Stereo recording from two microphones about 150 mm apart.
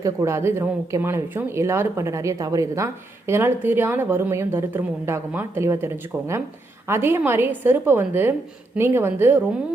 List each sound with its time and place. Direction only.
0.0 s speech: 20° right (ahead or behind)